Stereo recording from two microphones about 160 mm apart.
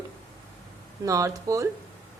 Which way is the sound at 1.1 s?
20° right (ahead or behind).